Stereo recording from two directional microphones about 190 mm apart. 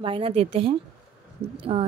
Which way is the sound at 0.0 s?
30° right (ahead or behind).